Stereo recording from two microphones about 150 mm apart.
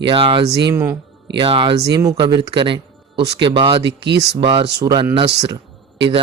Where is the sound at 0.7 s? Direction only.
15° right (ahead or behind).